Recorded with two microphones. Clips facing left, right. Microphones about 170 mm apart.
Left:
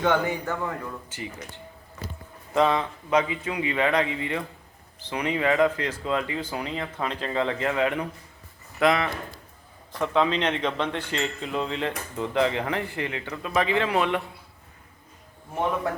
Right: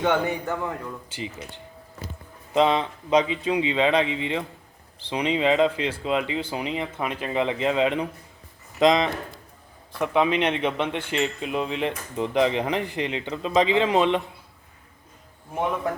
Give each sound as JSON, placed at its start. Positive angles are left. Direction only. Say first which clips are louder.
{"t": 0.0, "sound": "speech", "louder": "right 1 dB", "side_deg": -20}
{"t": 2.5, "sound": "speech", "louder": "right 2 dB", "side_deg": -20}